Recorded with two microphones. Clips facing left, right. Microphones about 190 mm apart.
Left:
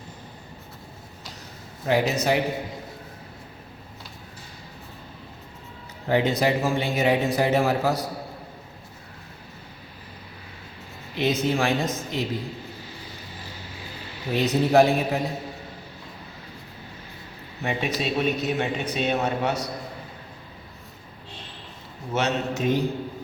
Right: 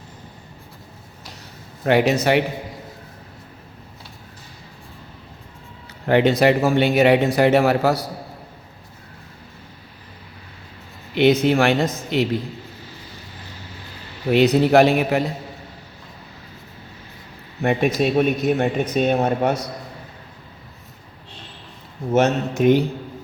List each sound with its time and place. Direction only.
1.8 s speech: 70° right (ahead or behind)
6.1 s speech: 70° right (ahead or behind)
11.1 s speech: 75° right (ahead or behind)
14.3 s speech: 80° right
17.6 s speech: 55° right (ahead or behind)
22.1 s speech: 50° right (ahead or behind)